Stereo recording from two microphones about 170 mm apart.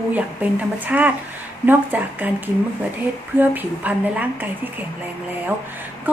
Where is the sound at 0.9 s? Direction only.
10° right (ahead or behind).